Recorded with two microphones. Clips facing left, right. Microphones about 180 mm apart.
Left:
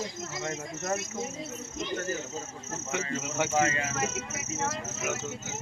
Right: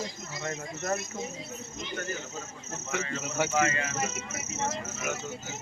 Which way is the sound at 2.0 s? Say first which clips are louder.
Left 3 dB; 30° left (ahead or behind).